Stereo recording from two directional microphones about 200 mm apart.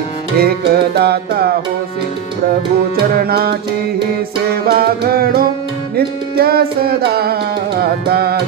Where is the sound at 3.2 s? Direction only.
50° right (ahead or behind).